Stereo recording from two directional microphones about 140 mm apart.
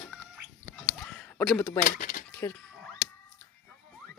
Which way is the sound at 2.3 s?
20° left (ahead or behind).